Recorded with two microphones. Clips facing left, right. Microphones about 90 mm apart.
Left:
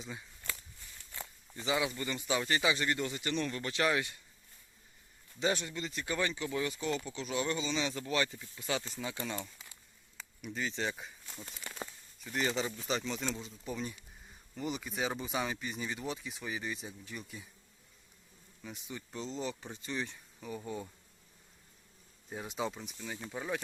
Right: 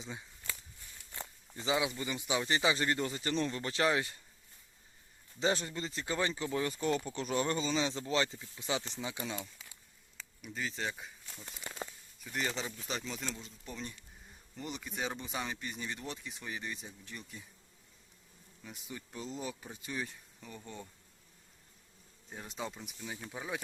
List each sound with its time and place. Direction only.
0.0 s speech: 25° right (ahead or behind)
1.5 s speech: 25° right (ahead or behind)
5.4 s speech: 30° right (ahead or behind)
7.9 s speech: 25° right (ahead or behind)
9.2 s speech: 5° right (ahead or behind)
18.6 s speech: centre (ahead or behind)
20.6 s bee: 10° left (ahead or behind)
22.3 s speech: 5° left (ahead or behind)